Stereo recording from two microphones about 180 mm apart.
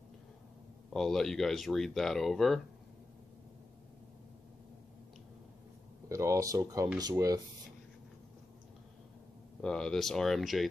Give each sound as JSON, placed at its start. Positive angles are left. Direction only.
{"t": 0.8, "sound": "speech", "side_deg": 0}
{"t": 6.0, "sound": "speech", "side_deg": -15}
{"t": 9.6, "sound": "speech", "side_deg": 5}